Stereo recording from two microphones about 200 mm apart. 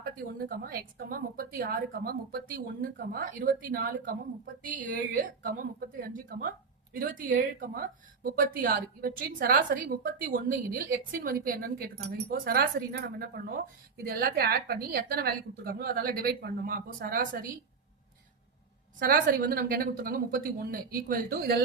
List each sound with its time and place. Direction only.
0.0 s speech: 50° right (ahead or behind)
18.9 s speech: 45° right (ahead or behind)